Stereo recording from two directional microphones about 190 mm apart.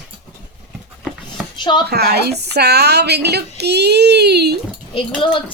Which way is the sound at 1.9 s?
60° right (ahead or behind).